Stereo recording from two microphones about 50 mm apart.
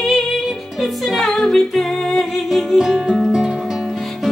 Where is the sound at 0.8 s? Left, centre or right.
Centre.